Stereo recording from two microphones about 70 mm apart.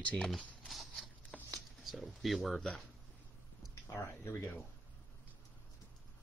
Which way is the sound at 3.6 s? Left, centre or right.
Left.